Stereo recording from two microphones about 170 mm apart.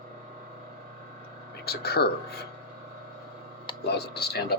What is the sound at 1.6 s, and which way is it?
Speech, 70° left (ahead or behind).